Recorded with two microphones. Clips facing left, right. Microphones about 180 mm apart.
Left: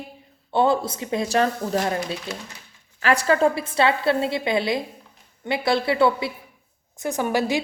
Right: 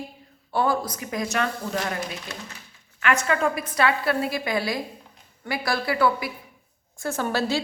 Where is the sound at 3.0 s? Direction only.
35° left (ahead or behind).